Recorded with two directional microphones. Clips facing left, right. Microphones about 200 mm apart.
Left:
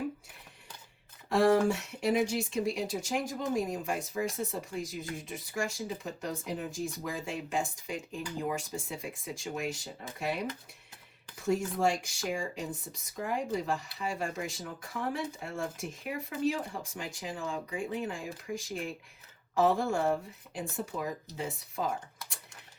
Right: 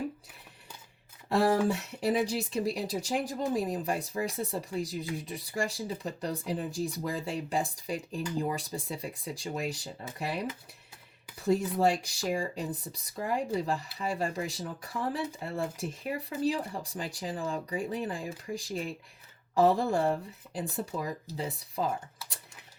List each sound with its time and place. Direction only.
1.3 s speech: 35° right (ahead or behind)
11.4 s speech: 35° right (ahead or behind)